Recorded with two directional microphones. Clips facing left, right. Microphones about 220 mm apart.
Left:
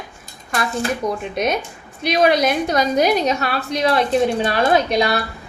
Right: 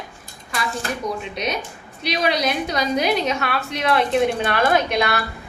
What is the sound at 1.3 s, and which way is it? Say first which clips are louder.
A woman's voice: left 5 dB; 50° left (ahead or behind).